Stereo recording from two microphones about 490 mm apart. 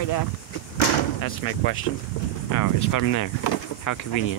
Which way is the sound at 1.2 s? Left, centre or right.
Left.